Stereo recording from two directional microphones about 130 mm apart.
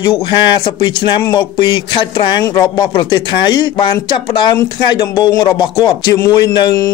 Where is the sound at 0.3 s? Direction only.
35° left (ahead or behind).